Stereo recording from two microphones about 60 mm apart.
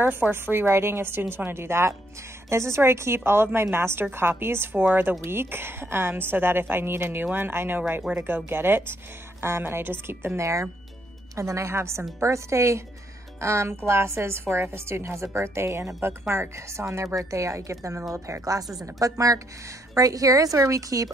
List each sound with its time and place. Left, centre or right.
0.2 s a woman's voice: right
18.9 s speech: right